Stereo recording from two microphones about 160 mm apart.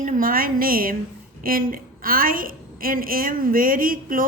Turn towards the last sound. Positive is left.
turn(degrees=-60)  # may be behind; listen again after turning